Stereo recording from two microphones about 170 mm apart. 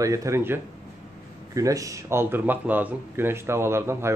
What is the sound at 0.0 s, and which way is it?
A man's voice, 20° right (ahead or behind).